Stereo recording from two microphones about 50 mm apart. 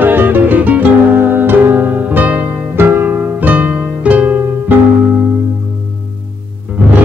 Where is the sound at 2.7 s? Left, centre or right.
Right.